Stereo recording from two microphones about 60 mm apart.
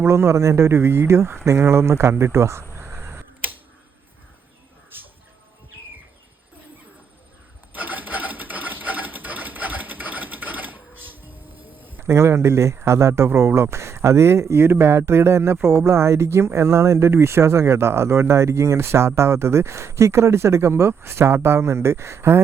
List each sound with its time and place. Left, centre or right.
0.0 s speech: right
2.7 s tick-tock: right
7.7 s sewing machine: right
11.6 s a sound: right
12.0 s speech: right